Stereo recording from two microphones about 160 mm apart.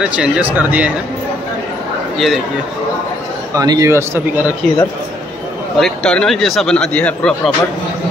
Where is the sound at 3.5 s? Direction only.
20° right (ahead or behind).